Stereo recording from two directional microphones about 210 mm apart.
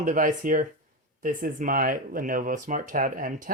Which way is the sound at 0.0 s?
40° right (ahead or behind).